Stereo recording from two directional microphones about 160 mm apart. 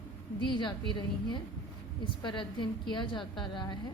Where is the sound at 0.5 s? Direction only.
30° left (ahead or behind).